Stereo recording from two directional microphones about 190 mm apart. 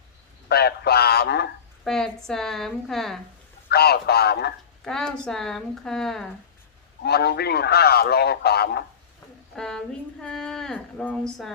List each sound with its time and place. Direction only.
0.4 s speech: 55° left (ahead or behind)
1.8 s a woman's voice: centre (ahead or behind)
3.7 s speech: 55° left (ahead or behind)
4.8 s a woman's voice: 5° left (ahead or behind)
7.0 s speech: 60° left (ahead or behind)
9.6 s a woman's voice: 5° left (ahead or behind)